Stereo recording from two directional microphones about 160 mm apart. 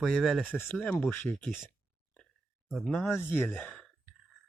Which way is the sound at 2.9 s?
10° left (ahead or behind).